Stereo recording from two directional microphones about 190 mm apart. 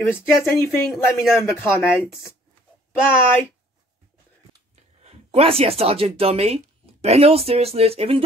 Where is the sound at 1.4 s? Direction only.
15° left (ahead or behind).